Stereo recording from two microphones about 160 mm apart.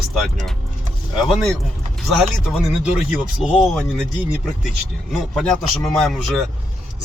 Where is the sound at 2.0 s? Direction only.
5° right (ahead or behind).